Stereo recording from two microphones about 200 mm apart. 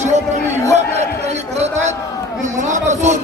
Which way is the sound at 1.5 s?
35° right (ahead or behind).